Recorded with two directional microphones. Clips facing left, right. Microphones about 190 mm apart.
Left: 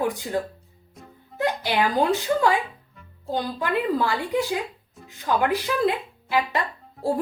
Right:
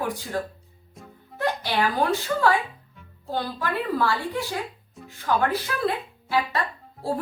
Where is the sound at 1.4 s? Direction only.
15° left (ahead or behind).